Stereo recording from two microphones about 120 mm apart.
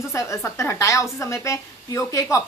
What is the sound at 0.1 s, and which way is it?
Speech, 25° left (ahead or behind).